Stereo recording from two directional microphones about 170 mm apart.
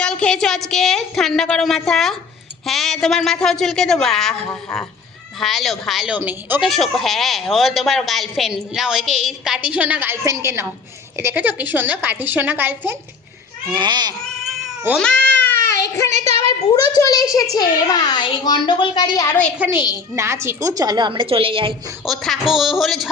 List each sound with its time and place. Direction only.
0.0 s a woman's voice: 5° left (ahead or behind)
6.7 s a woman's voice: centre (ahead or behind)
13.7 s a woman's voice: 25° right (ahead or behind)
14.3 s cat: centre (ahead or behind)
16.1 s a child's voice: 40° right (ahead or behind)
16.9 s a woman's voice: 20° left (ahead or behind)
19.5 s a woman's voice: 15° right (ahead or behind); by 21.8 s 30° right (ahead or behind)
22.0 s a woman's voice: centre (ahead or behind)